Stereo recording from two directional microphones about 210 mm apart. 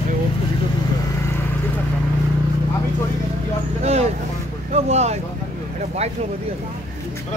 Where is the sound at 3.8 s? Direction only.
30° right (ahead or behind).